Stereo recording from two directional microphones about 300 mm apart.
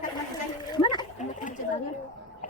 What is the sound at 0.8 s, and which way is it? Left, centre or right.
Splash, centre.